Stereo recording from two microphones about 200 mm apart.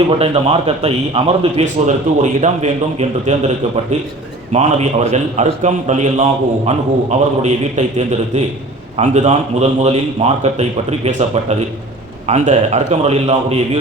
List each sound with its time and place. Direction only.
0.2 s a man's voice: 30° right (ahead or behind)
4.5 s a man's voice: 35° right (ahead or behind)